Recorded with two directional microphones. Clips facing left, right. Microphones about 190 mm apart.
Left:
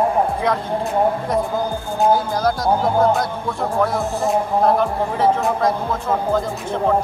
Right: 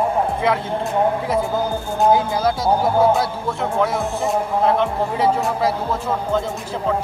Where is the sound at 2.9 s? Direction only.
5° right (ahead or behind).